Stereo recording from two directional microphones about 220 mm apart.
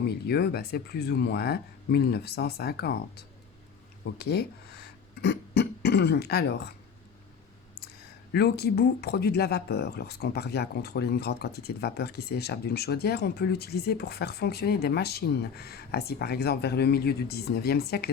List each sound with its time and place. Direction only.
0.1 s speech: 45° left (ahead or behind)
4.2 s a sound: 50° left (ahead or behind)
8.3 s speech: 45° left (ahead or behind)